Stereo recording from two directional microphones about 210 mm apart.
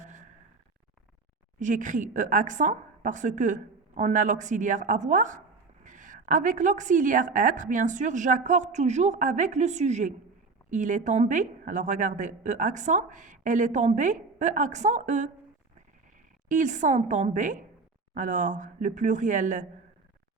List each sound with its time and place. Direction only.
0.0 s sigh: 35° right (ahead or behind)
1.5 s a woman's voice: 35° right (ahead or behind)
16.5 s a woman's voice: 35° right (ahead or behind)